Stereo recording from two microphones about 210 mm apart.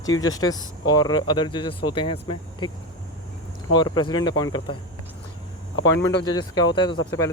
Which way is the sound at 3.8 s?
20° left (ahead or behind).